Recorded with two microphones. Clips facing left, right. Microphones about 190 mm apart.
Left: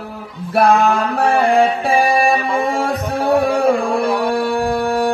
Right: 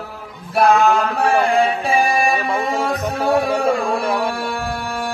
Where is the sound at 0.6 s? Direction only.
55° left (ahead or behind).